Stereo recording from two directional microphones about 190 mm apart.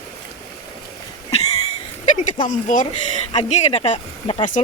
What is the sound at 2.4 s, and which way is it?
Speech, 40° left (ahead or behind).